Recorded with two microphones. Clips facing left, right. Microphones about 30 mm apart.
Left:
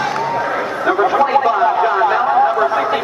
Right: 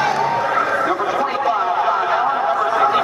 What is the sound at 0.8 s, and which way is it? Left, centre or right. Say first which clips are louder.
Chatter: left 5 dB; left.